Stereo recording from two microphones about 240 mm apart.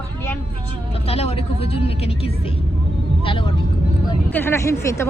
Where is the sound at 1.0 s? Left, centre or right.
Left.